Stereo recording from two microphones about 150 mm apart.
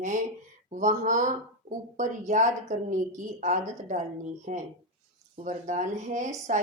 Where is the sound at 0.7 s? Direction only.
55° right (ahead or behind).